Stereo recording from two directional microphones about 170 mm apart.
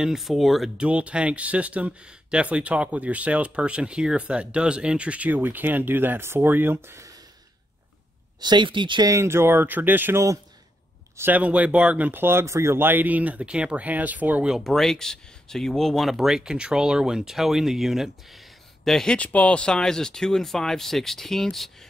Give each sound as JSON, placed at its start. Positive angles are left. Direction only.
{"t": 0.0, "sound": "speech", "side_deg": 0}
{"t": 8.4, "sound": "speech", "side_deg": -25}